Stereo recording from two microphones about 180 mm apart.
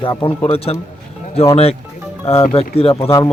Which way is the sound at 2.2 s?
35° left (ahead or behind).